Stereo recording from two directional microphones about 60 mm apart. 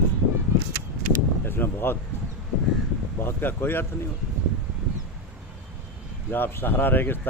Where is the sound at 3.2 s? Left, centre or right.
Left.